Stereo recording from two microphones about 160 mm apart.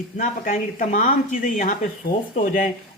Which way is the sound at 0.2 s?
50° left (ahead or behind).